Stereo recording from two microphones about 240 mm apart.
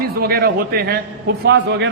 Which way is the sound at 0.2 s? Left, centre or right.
Right.